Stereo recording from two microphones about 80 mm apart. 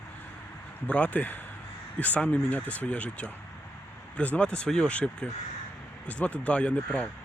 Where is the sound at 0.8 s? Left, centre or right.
Centre.